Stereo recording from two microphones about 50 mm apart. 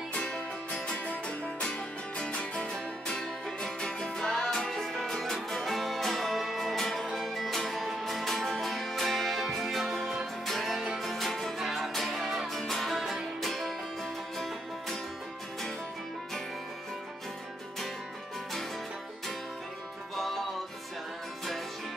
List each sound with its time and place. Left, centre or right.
0.7 s music: left; by 13.7 s centre
20.2 s music: centre